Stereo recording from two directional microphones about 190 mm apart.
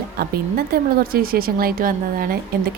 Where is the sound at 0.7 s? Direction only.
50° right (ahead or behind).